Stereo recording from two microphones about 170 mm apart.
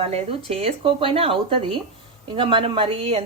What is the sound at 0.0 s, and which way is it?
A woman's voice, 35° right (ahead or behind).